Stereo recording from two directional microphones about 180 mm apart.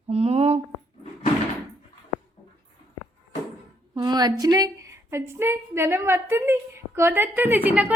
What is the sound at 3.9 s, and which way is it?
A woman's voice, 20° right (ahead or behind).